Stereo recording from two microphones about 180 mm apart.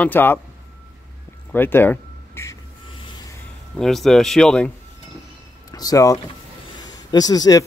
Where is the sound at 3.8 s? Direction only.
Centre (ahead or behind).